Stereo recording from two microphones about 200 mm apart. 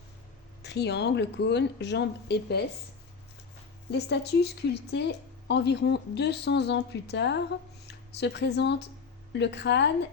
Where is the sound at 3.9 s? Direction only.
55° left (ahead or behind).